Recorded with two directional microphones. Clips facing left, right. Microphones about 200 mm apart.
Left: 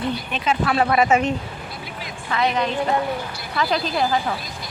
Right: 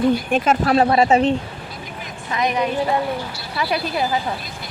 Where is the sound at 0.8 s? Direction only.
30° right (ahead or behind).